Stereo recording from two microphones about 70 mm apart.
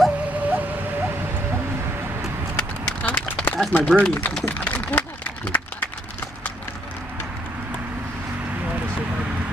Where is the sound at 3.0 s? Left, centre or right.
Left.